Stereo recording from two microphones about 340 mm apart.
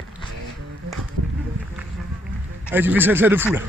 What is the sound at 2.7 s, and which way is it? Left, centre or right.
Speech, centre.